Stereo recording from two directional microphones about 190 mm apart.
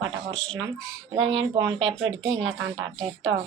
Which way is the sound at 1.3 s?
25° right (ahead or behind).